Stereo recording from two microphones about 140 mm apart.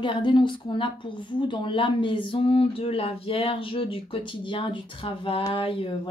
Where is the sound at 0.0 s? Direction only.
35° left (ahead or behind).